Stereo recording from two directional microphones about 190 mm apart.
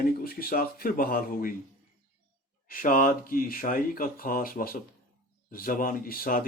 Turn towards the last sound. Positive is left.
turn(degrees=50)  # may be behind; listen again after turning